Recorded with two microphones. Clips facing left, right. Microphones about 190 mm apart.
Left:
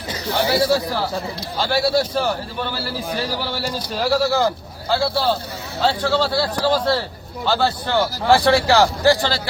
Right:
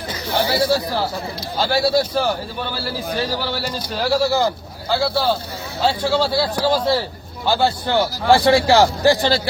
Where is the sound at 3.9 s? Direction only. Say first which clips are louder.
Right 1 dB; centre (ahead or behind).